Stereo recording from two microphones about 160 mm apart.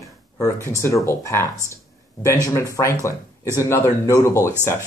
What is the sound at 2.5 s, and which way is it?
Speech, 20° left (ahead or behind).